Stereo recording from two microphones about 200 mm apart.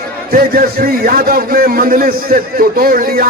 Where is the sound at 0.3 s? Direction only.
50° right (ahead or behind).